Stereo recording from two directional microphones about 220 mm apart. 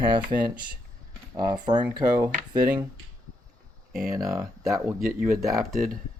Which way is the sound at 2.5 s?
20° right (ahead or behind).